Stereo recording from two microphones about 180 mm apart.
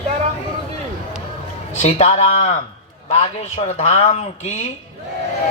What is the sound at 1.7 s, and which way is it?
Speech, 40° left (ahead or behind).